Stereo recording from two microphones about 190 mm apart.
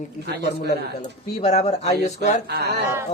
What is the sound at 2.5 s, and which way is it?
Speech, 60° right (ahead or behind).